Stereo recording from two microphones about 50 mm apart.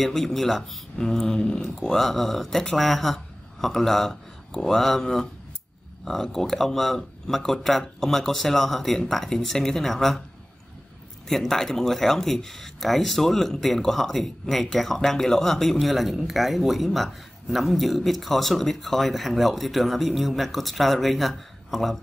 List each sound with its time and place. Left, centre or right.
0.0 s speech: centre
11.2 s speech: centre